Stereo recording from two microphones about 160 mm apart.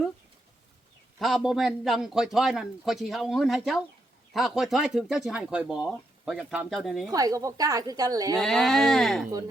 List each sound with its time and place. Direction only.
1.2 s speech: centre (ahead or behind)
7.1 s speech: 20° right (ahead or behind)
8.4 s speech: centre (ahead or behind)